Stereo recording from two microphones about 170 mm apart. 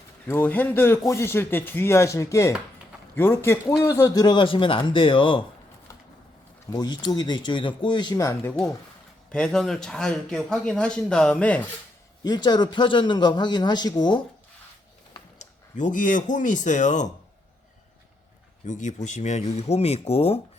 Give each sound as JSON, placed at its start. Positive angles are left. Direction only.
{"t": 0.3, "sound": "a man's voice", "side_deg": 10}
{"t": 6.7, "sound": "a man's voice", "side_deg": 25}
{"t": 9.3, "sound": "speech", "side_deg": 5}
{"t": 12.2, "sound": "a man's voice", "side_deg": 25}
{"t": 15.4, "sound": "speech", "side_deg": 45}
{"t": 18.6, "sound": "speech", "side_deg": 45}